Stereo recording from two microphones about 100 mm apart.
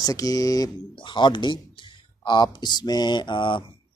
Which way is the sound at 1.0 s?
50° left (ahead or behind).